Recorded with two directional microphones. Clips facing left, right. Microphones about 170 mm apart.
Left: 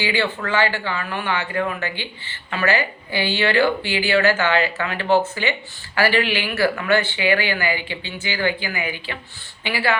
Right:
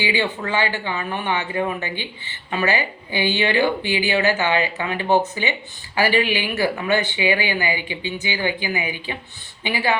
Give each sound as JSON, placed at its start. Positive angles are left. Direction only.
{"t": 0.0, "sound": "speech", "side_deg": -15}